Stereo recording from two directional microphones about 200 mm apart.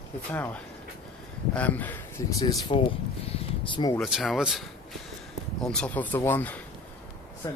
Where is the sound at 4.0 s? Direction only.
Centre (ahead or behind).